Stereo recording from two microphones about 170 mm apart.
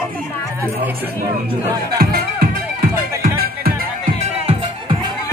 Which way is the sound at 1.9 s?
60° right (ahead or behind).